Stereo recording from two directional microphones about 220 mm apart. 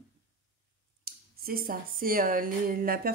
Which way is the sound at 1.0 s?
40° right (ahead or behind).